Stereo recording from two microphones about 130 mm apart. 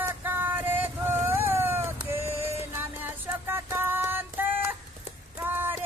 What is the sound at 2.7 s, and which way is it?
Music, 15° right (ahead or behind).